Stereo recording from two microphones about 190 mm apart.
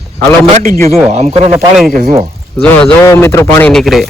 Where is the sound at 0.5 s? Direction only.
45° right (ahead or behind).